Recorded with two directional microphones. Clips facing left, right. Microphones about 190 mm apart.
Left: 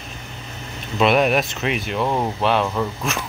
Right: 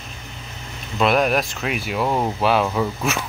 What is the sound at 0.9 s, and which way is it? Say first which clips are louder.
Speech: left 1 dB; centre (ahead or behind).